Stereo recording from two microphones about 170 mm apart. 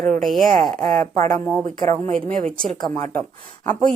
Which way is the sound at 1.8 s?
40° right (ahead or behind).